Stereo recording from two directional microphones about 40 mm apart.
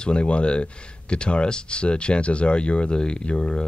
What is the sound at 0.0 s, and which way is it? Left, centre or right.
Speech, left.